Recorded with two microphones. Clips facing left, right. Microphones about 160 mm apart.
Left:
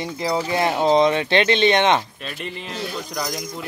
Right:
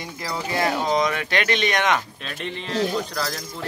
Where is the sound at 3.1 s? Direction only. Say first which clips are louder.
Left 1 dB; 15° left (ahead or behind).